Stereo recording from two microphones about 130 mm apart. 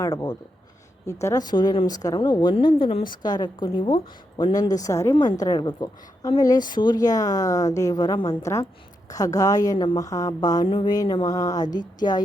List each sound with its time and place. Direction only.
0.0 s a woman's voice: 25° left (ahead or behind)
4.5 s a woman's voice: 30° left (ahead or behind)
5.1 s a woman's voice: 35° left (ahead or behind)